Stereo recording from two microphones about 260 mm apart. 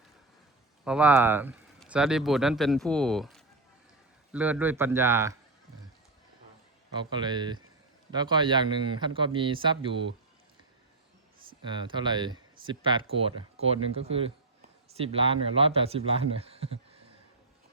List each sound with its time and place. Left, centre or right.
0.9 s a man's voice: centre
6.9 s a man's voice: centre
11.6 s speech: centre